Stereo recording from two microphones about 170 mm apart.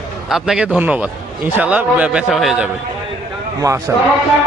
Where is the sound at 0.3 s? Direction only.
5° right (ahead or behind).